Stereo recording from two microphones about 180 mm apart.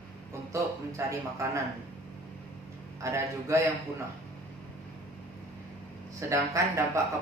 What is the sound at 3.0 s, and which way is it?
A man's voice, 15° right (ahead or behind).